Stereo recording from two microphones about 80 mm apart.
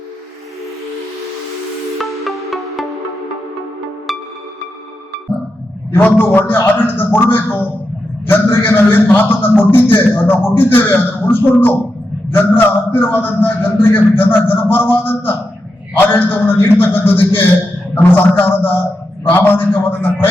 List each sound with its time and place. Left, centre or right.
2.0 s music: centre
5.9 s a man's voice: left